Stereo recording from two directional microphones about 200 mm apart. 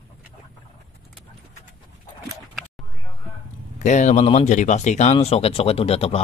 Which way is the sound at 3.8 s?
35° left (ahead or behind).